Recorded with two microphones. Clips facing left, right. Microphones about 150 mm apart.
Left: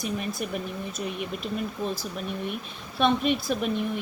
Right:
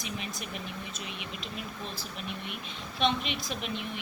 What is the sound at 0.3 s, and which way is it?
A woman's voice, 50° left (ahead or behind).